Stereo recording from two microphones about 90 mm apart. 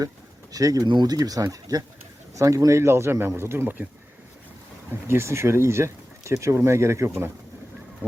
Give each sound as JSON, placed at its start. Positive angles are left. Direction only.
{"t": 0.5, "sound": "speech", "side_deg": -40}
{"t": 4.9, "sound": "speech", "side_deg": -25}